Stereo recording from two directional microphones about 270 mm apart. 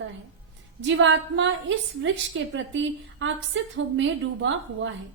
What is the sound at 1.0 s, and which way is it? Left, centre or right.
A woman's voice, right.